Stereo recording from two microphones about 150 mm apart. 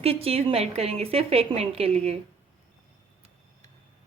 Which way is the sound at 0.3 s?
40° right (ahead or behind).